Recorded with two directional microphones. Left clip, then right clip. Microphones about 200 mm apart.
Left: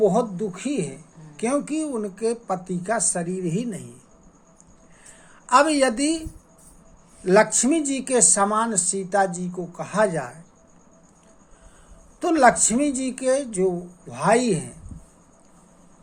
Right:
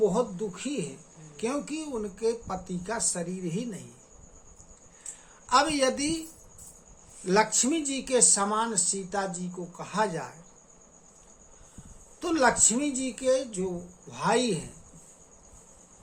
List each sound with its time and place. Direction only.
0.0 s speech: 25° left (ahead or behind)
5.5 s speech: 20° left (ahead or behind)
7.3 s speech: 25° left (ahead or behind)
12.2 s speech: 25° left (ahead or behind)